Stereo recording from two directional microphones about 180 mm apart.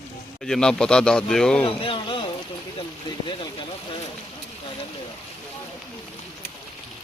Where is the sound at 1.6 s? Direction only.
30° left (ahead or behind).